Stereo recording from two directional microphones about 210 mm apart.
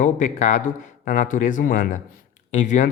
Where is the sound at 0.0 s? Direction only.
35° left (ahead or behind).